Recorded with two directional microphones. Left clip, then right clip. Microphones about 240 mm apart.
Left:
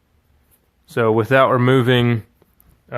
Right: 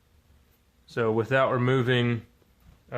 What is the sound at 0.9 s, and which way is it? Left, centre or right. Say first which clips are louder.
Speech: left 9 dB; left.